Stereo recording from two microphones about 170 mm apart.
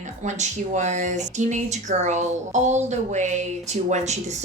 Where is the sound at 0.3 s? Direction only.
45° right (ahead or behind).